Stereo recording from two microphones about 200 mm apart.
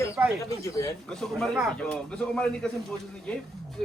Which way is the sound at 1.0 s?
Centre (ahead or behind).